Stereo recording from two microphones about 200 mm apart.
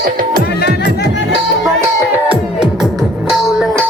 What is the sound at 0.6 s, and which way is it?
Music, 55° left (ahead or behind).